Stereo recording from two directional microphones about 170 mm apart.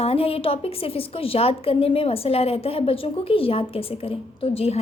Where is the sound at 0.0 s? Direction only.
35° left (ahead or behind).